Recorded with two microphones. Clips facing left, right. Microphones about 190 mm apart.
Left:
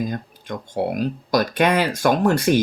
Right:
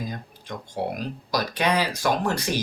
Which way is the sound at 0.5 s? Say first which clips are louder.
Left 5 dB; 50° left (ahead or behind).